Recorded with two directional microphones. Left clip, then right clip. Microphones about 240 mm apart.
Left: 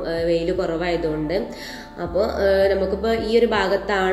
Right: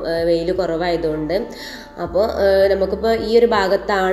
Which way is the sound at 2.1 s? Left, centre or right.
Centre.